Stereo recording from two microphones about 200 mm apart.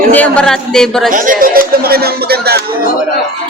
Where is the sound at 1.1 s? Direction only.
45° right (ahead or behind).